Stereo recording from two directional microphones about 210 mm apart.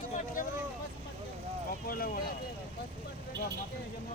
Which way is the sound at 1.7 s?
45° left (ahead or behind).